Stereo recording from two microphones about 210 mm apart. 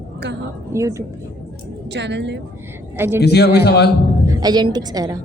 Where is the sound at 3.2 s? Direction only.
50° left (ahead or behind).